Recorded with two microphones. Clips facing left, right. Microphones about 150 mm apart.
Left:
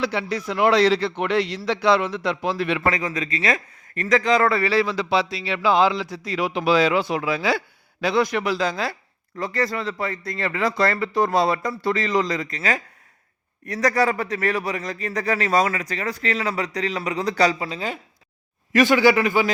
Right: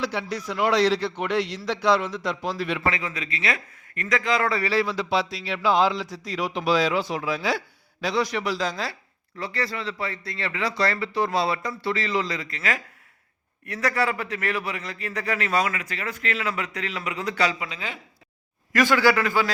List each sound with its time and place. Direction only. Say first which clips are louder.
0.0 s a man's voice: left 4 dB; 65° left (ahead or behind)
2.8 s a man's voice: left 4 dB; 40° left (ahead or behind)
4.4 s a man's voice: left 4 dB; 60° left (ahead or behind)
8.0 s a man's voice: left 4 dB; 55° left (ahead or behind)
9.4 s a man's voice: left 5 dB; 45° left (ahead or behind)
18.7 s a man's voice: left 4 dB; 20° left (ahead or behind)